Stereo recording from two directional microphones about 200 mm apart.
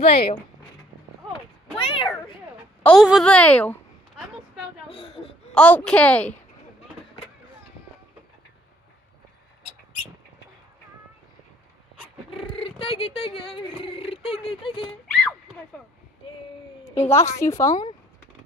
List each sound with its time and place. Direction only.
0.0 s speech: 30° left (ahead or behind)
1.8 s speech: 25° left (ahead or behind)
2.8 s a woman's voice: centre (ahead or behind)
4.8 s a sound: 25° left (ahead or behind)
5.5 s a woman's voice: 5° left (ahead or behind)
12.4 s speech: 30° left (ahead or behind)
15.0 s a sound: 5° left (ahead or behind)
16.8 s a woman's voice: 15° left (ahead or behind)